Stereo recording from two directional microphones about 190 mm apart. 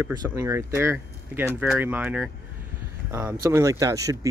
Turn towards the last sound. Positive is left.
turn(degrees=-15)  # may be behind; listen again after turning